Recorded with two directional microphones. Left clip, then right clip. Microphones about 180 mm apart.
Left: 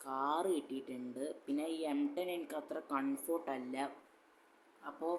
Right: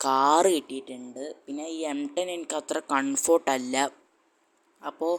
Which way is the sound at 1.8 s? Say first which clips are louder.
Right 8 dB; 35° right (ahead or behind).